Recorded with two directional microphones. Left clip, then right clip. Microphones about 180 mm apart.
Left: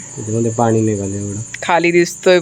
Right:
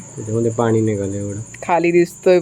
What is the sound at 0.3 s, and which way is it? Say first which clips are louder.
Speech: left 2 dB; 35° left (ahead or behind).